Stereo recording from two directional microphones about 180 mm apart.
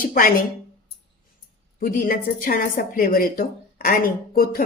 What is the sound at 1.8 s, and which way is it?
A woman's voice, 50° left (ahead or behind).